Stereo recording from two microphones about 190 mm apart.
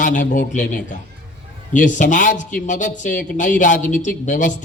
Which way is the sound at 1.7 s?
40° left (ahead or behind).